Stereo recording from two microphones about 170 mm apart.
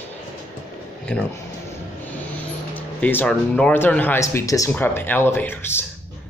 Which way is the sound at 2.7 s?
10° left (ahead or behind).